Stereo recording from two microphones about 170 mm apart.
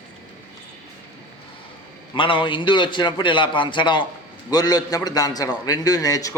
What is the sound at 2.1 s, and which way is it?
A man's voice, 30° left (ahead or behind).